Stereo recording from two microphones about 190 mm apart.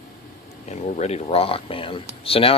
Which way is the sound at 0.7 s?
35° left (ahead or behind).